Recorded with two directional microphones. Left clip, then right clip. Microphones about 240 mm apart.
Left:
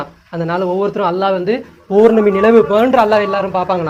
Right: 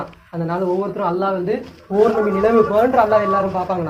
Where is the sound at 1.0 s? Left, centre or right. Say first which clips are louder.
Left 5 dB; left.